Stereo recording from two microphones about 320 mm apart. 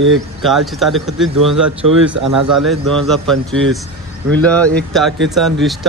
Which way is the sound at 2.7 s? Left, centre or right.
Centre.